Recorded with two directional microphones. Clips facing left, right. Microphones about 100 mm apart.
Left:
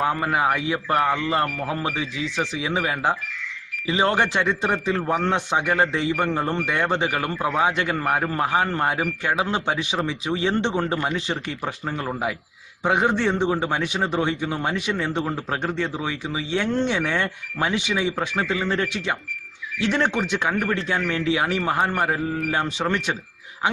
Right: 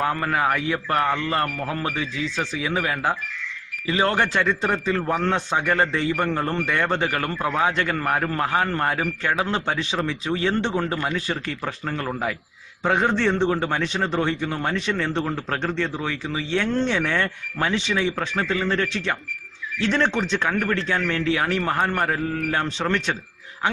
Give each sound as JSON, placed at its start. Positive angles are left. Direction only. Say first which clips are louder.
{"t": 0.0, "sound": "a man's voice", "louder": "left 1 dB", "side_deg": 20}